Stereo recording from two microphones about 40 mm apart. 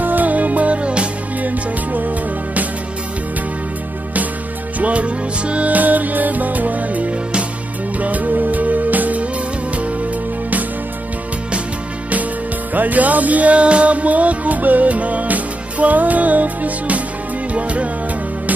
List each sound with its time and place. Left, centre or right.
0.0 s music: right
1.4 s music: right
4.7 s music: right
12.7 s music: right